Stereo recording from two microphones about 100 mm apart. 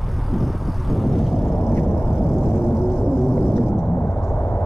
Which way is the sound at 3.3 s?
20° left (ahead or behind).